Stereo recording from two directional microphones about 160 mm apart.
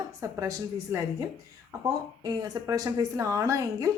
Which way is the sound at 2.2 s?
25° right (ahead or behind).